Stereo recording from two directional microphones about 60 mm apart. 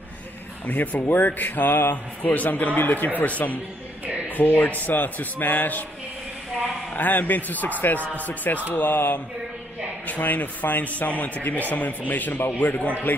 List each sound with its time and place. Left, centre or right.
0.7 s a man's voice: left
4.0 s a sound: right
4.4 s a man's voice: left
7.0 s a man's voice: left